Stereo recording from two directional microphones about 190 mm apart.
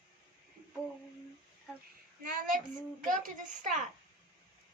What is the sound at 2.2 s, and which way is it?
Speech, 50° right (ahead or behind).